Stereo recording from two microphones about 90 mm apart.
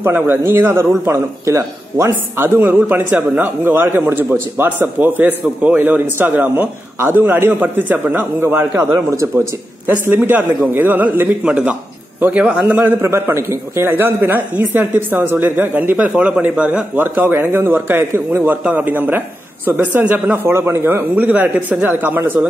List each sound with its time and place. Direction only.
0.0 s a man's voice: 25° right (ahead or behind)
8.9 s speech: 35° right (ahead or behind)
9.8 s a man's voice: 25° right (ahead or behind)
13.0 s a man's voice: 30° right (ahead or behind)
21.1 s a man's voice: 20° right (ahead or behind)